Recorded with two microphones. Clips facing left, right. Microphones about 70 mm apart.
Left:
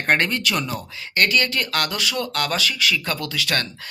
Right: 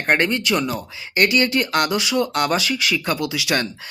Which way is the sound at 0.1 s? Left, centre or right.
Centre.